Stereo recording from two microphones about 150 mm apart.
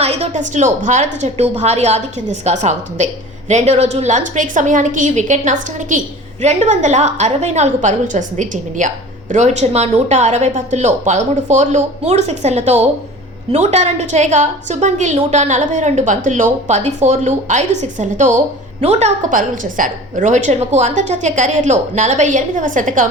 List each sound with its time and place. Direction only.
0.0 s a woman's voice: 45° right (ahead or behind); by 23.0 s 60° right (ahead or behind)